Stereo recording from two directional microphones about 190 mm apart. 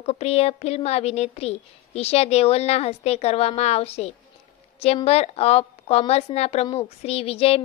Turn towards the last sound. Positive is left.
turn(degrees=30)  # may be behind; listen again after turning